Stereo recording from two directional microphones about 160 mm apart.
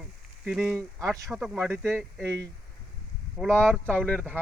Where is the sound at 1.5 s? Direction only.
15° right (ahead or behind).